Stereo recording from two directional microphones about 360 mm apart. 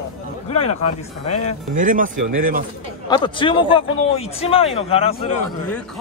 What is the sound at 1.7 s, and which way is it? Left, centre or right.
Speech, right.